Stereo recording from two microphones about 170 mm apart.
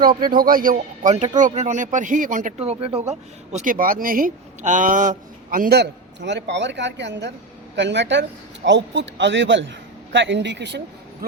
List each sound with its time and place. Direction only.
0.3 s a man's voice: 55° right (ahead or behind); by 10.8 s 90° right